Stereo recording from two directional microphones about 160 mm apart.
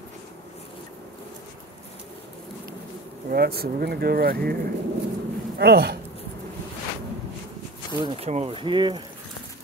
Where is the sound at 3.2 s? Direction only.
80° right.